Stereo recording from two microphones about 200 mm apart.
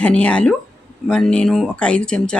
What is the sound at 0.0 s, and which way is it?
Speech, 5° left (ahead or behind).